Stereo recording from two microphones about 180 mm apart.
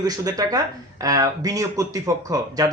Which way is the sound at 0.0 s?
20° right (ahead or behind).